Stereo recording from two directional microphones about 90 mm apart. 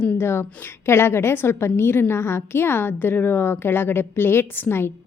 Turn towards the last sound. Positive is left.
turn(degrees=25)  # may be behind; listen again after turning